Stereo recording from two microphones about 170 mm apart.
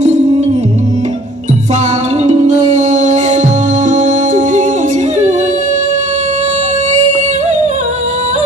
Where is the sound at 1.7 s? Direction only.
45° right (ahead or behind).